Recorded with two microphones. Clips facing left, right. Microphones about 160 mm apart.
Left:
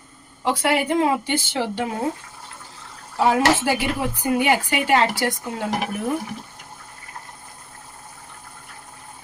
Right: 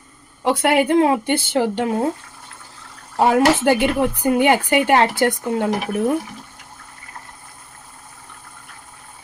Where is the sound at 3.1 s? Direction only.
55° right (ahead or behind).